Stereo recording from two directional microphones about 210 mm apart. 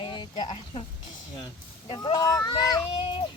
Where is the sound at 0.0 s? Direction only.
20° left (ahead or behind).